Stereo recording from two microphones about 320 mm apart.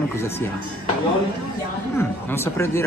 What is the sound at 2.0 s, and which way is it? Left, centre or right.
Speech, centre.